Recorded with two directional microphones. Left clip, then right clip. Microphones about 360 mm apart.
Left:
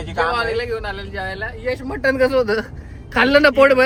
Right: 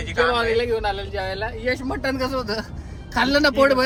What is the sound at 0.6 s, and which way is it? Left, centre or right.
Speech, centre.